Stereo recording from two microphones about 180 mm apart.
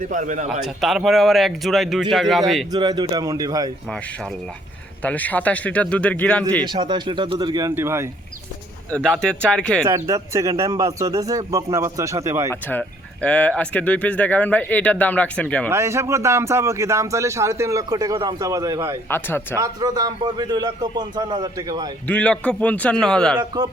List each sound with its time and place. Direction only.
0.1 s a man's voice: 45° right (ahead or behind)
0.6 s speech: centre (ahead or behind)
2.7 s a man's voice: 25° right (ahead or behind)
5.0 s speech: 10° left (ahead or behind)
6.7 s a man's voice: 25° right (ahead or behind)
8.9 s speech: 5° left (ahead or behind)
9.8 s a man's voice: 15° right (ahead or behind)
12.5 s speech: 10° left (ahead or behind)
15.7 s a man's voice: 15° right (ahead or behind)
19.0 s speech: 10° left (ahead or behind)
19.5 s a man's voice: 15° right (ahead or behind)
22.0 s speech: 10° left (ahead or behind)